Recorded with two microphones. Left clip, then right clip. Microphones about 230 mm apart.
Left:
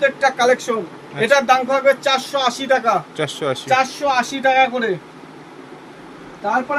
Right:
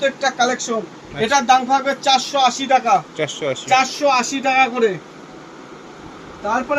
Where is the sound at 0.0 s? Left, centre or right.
Left.